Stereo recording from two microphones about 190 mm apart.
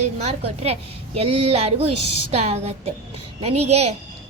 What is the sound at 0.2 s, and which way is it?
A woman's voice, 35° right (ahead or behind).